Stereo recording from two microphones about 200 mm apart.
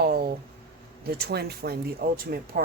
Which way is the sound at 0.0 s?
50° right (ahead or behind).